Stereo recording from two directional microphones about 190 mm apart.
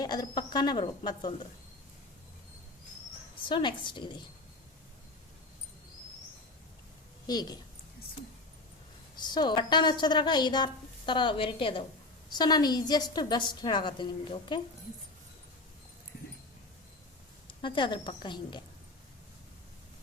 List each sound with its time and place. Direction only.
0.0 s a woman's voice: 20° left (ahead or behind)
3.5 s a woman's voice: 25° left (ahead or behind)
7.3 s a woman's voice: 20° left (ahead or behind)
9.2 s a woman's voice: 25° left (ahead or behind)
17.6 s a woman's voice: 25° left (ahead or behind)